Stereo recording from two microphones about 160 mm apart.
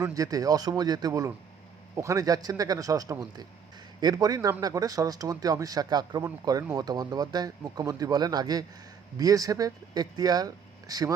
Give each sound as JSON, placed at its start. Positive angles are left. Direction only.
{"t": 0.0, "sound": "speech", "side_deg": -20}